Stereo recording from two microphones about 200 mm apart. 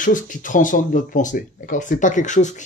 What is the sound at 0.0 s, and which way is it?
Speech, 40° left (ahead or behind).